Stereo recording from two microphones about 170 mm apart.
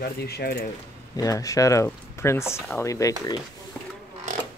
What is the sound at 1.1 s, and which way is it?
Speech, 20° left (ahead or behind).